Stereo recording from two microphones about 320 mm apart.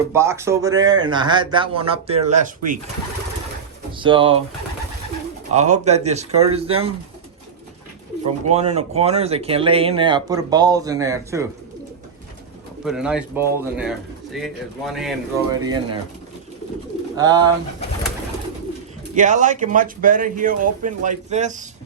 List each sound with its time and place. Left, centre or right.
0.1 s speech: centre
3.9 s speech: centre
5.5 s speech: right
8.4 s speech: centre
12.8 s speech: centre
15.6 s speech: centre
17.2 s speech: centre
19.1 s speech: right